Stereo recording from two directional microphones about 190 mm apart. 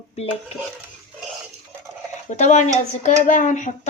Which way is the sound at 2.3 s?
40° left (ahead or behind).